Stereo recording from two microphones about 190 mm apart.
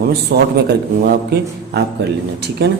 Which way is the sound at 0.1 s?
55° right (ahead or behind).